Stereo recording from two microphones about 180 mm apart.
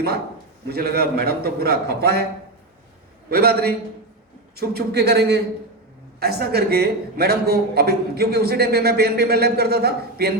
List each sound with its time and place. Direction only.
0.7 s a man's voice: 60° right (ahead or behind)
3.2 s a man's voice: 60° right (ahead or behind)